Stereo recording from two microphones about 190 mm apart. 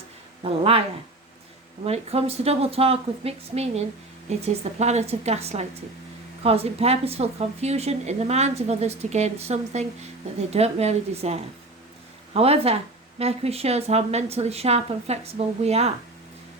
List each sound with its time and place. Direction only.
0.4 s a woman's voice: 30° right (ahead or behind)